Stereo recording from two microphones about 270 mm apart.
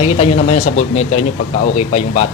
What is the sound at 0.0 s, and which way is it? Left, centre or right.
A man's voice, left.